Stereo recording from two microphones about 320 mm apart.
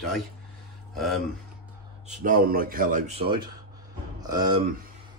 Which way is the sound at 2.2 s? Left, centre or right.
Right.